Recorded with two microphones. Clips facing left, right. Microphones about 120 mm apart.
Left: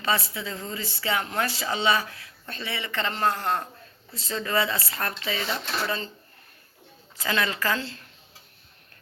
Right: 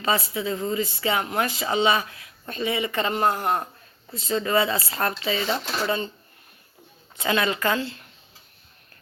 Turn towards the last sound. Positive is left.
turn(degrees=-20)  # may be behind; listen again after turning